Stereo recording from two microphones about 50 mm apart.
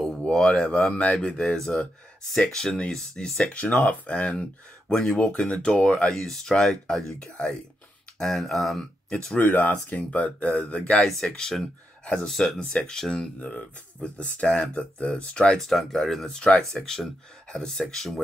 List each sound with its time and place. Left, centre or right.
0.0 s a sound: centre
0.9 s speech: left
3.5 s speech: left
6.1 s speech: centre
9.4 s speech: left
11.2 s speech: centre
12.0 s speech: left
12.3 s speech: centre
12.5 s speech: centre
14.0 s speech: left
15.5 s speech: centre
16.3 s speech: left
16.7 s speech: centre